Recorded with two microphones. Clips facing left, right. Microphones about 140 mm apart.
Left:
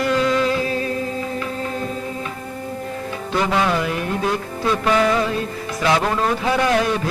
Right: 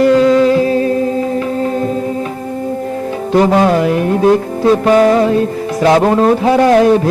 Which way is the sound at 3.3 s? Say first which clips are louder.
Right 9 dB; 40° right (ahead or behind).